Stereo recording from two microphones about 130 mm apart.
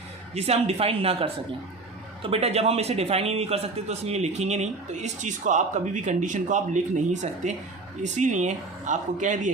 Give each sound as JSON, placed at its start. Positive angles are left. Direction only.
{"t": 0.3, "sound": "a man's voice", "side_deg": -55}